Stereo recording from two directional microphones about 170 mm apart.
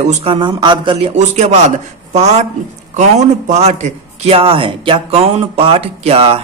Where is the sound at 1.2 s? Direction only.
40° right (ahead or behind).